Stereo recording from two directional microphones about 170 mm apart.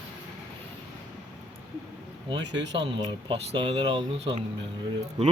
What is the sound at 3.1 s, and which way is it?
Speech, 30° right (ahead or behind).